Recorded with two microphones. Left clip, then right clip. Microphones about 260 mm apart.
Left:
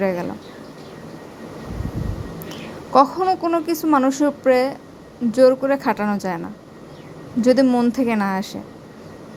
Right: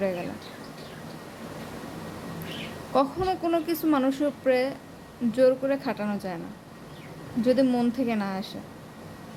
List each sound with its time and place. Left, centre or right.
0.0 s speech: centre
2.9 s a woman's voice: centre
7.4 s speech: left